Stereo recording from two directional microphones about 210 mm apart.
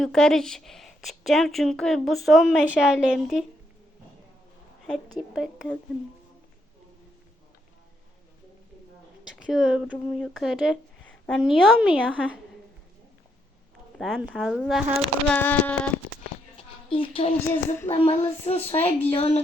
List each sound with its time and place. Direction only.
0.0 s speech: 5° left (ahead or behind)
5.3 s speech: centre (ahead or behind)
9.3 s a woman's voice: 5° right (ahead or behind)
14.0 s speech: centre (ahead or behind)
15.3 s a sound: 10° left (ahead or behind)
16.6 s a woman's voice: 25° left (ahead or behind)